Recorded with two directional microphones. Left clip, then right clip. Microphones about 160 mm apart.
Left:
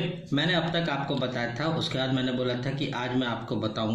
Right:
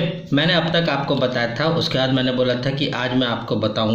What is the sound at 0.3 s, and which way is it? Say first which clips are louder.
A man's voice: right 8 dB; 30° right (ahead or behind).